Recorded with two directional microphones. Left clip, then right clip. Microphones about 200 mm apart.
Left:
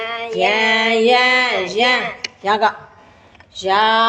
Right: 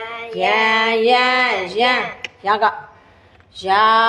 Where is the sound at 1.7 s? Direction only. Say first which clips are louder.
Left 1 dB; 5° left (ahead or behind).